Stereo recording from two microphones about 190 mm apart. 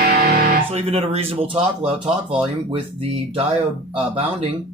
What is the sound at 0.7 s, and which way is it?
Speech, 35° right (ahead or behind).